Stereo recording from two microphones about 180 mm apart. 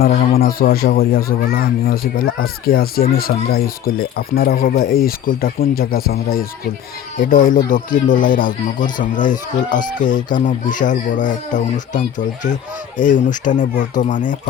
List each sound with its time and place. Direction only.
0.0 s speech: 55° left (ahead or behind)